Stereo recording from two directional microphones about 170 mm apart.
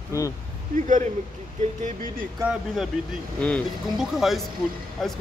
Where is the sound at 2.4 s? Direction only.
Centre (ahead or behind).